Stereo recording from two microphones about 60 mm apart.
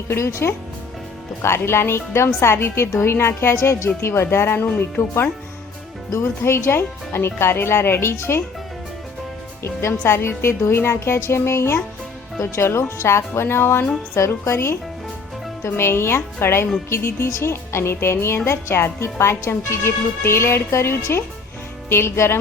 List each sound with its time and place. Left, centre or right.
0.1 s speech: left
9.6 s speech: left